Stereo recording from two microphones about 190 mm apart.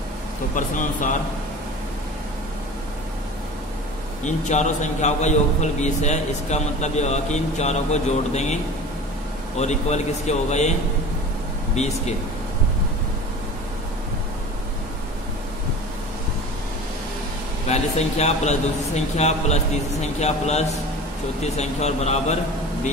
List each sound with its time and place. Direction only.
0.6 s speech: 45° left (ahead or behind)
4.2 s a man's voice: 40° left (ahead or behind)
9.6 s a man's voice: 35° left (ahead or behind)
11.8 s a man's voice: 35° left (ahead or behind)
17.6 s a man's voice: 35° left (ahead or behind)